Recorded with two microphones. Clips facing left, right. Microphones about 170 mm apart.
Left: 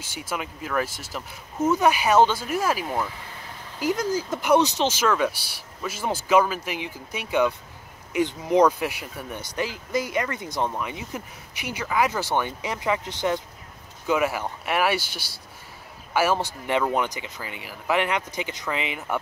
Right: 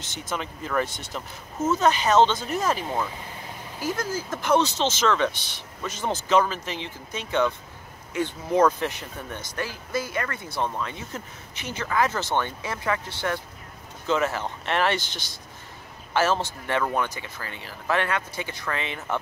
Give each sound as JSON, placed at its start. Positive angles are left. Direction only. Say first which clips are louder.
{"t": 0.0, "sound": "speech", "louder": "even", "side_deg": 10}